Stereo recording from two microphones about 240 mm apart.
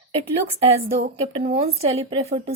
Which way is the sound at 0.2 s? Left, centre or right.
Right.